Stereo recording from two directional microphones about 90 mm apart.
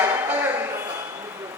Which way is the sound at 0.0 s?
20° right (ahead or behind).